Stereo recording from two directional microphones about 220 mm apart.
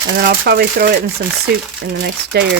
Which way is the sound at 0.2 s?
45° right (ahead or behind).